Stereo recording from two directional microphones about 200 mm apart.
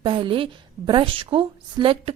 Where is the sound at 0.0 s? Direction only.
25° right (ahead or behind).